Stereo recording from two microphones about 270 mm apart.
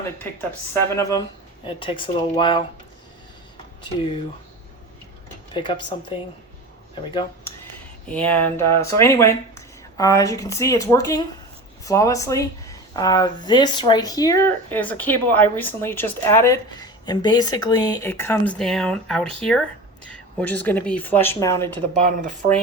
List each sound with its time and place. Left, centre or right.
0.7 s speech: centre
5.5 s speech: centre
8.1 s speech: centre
22.0 s speech: right